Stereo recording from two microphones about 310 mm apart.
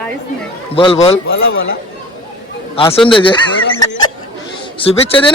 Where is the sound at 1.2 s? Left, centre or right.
Left.